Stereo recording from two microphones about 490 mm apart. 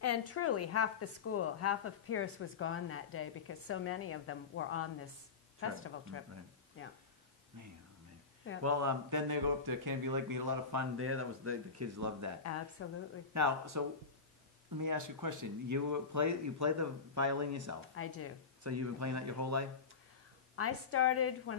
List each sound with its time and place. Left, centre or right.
0.0 s a woman's voice: left
8.6 s speech: right
12.8 s a woman's voice: left
13.3 s speech: right
17.9 s a woman's voice: left
18.6 s speech: right
20.5 s a woman's voice: left